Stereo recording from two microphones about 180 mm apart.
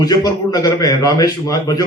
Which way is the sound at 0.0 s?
20° left (ahead or behind).